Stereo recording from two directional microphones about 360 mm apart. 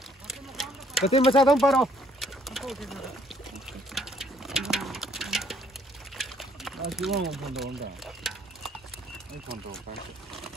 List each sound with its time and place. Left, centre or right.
0.3 s a sound: centre
1.0 s speech: centre
1.4 s a sound: centre
6.1 s liquid: centre
6.9 s speech: centre
8.0 s stir: centre